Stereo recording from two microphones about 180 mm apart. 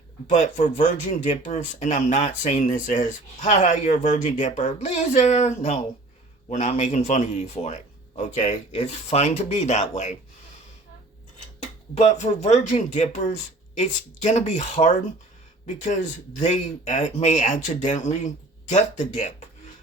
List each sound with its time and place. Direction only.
0.3 s speech: 45° left (ahead or behind)
11.9 s speech: 40° left (ahead or behind)